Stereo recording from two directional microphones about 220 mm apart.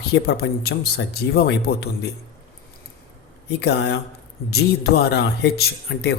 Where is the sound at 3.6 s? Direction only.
50° left (ahead or behind).